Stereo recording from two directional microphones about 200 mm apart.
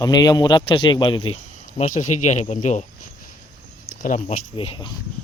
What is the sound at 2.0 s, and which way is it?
Speech, 35° left (ahead or behind).